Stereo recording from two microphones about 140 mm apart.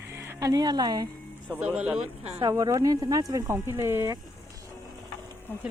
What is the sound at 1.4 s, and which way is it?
Speech, 10° right (ahead or behind).